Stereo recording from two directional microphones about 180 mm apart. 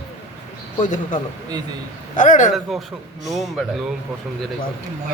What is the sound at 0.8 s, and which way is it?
Speech, 45° left (ahead or behind).